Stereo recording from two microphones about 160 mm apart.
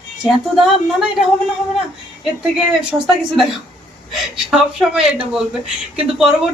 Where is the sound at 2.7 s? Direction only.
5° right (ahead or behind).